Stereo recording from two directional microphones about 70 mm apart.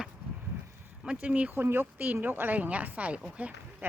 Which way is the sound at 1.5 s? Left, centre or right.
Right.